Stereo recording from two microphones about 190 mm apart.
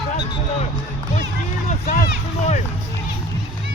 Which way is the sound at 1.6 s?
40° left (ahead or behind).